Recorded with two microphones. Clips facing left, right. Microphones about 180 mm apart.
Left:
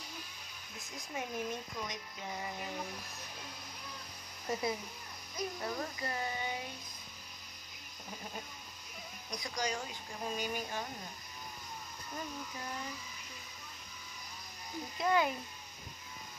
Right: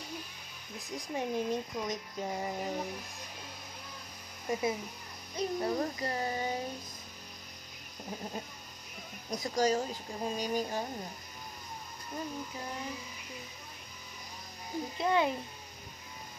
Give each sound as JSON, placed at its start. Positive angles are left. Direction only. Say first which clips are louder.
{"t": 0.9, "sound": "speech", "louder": "right 6 dB", "side_deg": -30}
{"t": 4.5, "sound": "speech", "louder": "right 3 dB", "side_deg": -20}
{"t": 5.3, "sound": "speech", "louder": "right 7 dB", "side_deg": -30}
{"t": 9.4, "sound": "speech", "louder": "right 9 dB", "side_deg": -40}
{"t": 15.0, "sound": "speech", "louder": "right 2 dB", "side_deg": -25}